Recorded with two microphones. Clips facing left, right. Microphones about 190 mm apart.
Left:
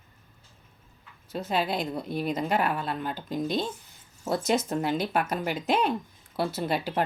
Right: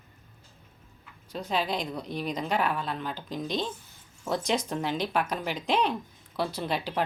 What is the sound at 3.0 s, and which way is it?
Speech, 50° left (ahead or behind).